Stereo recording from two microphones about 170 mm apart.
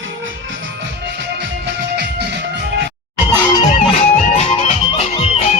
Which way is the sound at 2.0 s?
80° right.